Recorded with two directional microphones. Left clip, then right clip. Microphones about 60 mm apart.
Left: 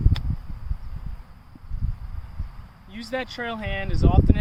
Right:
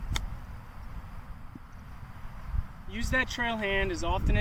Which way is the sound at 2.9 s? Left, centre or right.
Left.